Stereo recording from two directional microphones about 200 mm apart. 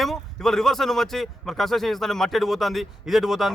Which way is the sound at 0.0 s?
Centre (ahead or behind).